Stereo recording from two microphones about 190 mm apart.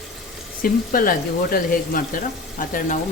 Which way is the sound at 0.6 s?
50° left (ahead or behind).